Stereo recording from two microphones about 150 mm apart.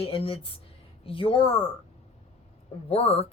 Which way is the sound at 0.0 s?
40° left (ahead or behind).